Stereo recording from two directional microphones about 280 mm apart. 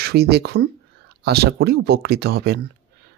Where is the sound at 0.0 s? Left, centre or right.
Right.